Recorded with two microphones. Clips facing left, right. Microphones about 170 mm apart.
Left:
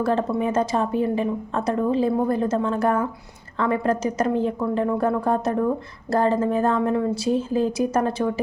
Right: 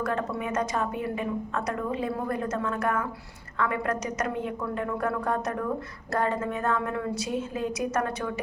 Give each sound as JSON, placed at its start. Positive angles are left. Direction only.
{"t": 0.0, "sound": "a woman's voice", "side_deg": 30}